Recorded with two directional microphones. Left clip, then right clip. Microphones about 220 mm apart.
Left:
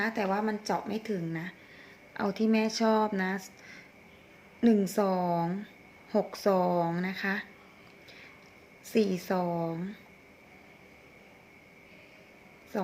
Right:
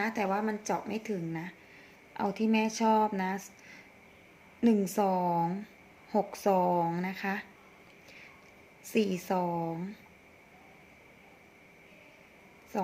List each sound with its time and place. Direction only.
0.0 s speech: 10° right (ahead or behind)
8.9 s speech: 5° right (ahead or behind)
12.7 s a man's voice: 5° right (ahead or behind)